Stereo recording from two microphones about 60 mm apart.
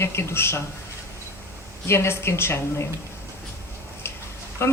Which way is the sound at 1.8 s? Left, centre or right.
Left.